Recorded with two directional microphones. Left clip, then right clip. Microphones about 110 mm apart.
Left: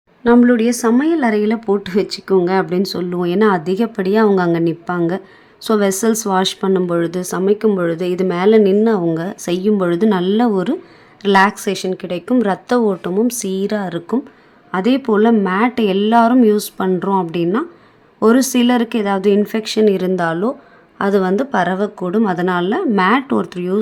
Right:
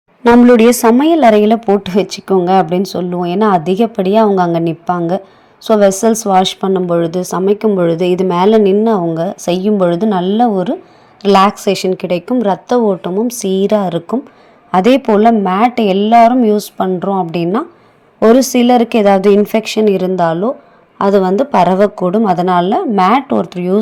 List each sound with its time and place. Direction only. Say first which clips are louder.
0.3 s speech: right 6 dB; 50° right (ahead or behind)
0.9 s a woman's voice: right 7 dB; 40° right (ahead or behind); by 10.8 s centre (ahead or behind)
11.2 s a woman's voice: right 4 dB; 20° right (ahead or behind)
11.8 s a woman's voice: right 7 dB; 30° right (ahead or behind)
12.4 s a woman's voice: right 3 dB; centre (ahead or behind); by 14.2 s 20° right (ahead or behind)
14.7 s speech: right 8 dB; 35° right (ahead or behind)
15.0 s a woman's voice: right 4 dB; 15° right (ahead or behind)
17.3 s a woman's voice: right 2 dB; 20° right (ahead or behind)
18.9 s speech: right 8 dB; 35° right (ahead or behind)
19.4 s a woman's voice: right 3 dB; 20° right (ahead or behind)
22.0 s a woman's voice: right 5 dB; 20° right (ahead or behind)